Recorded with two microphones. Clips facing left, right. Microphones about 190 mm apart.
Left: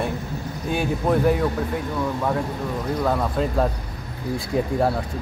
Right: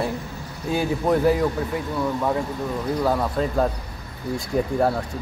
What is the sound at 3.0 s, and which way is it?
Speech, centre (ahead or behind).